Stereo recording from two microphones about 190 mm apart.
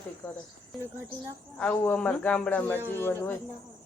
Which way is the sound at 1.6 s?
5° left (ahead or behind).